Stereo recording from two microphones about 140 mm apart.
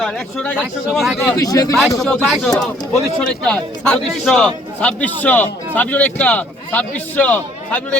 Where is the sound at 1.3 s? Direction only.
25° left (ahead or behind).